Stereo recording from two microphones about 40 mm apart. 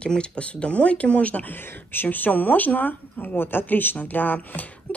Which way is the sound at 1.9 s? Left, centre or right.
Left.